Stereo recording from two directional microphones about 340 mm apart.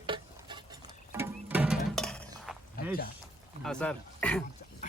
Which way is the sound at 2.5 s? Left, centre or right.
Centre.